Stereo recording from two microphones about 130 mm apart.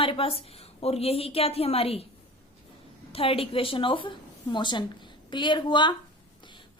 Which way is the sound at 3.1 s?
45° left (ahead or behind).